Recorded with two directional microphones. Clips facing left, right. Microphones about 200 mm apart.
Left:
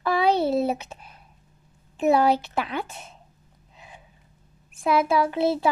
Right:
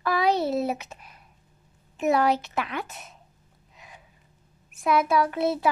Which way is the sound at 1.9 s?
30° left (ahead or behind).